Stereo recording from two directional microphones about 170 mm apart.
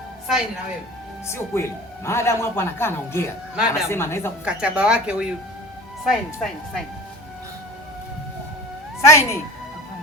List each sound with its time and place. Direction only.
1.3 s speech: 15° left (ahead or behind)
3.5 s speech: 5° right (ahead or behind)
3.8 s speech: 15° left (ahead or behind)
4.4 s speech: 5° right (ahead or behind)
9.0 s speech: 15° left (ahead or behind)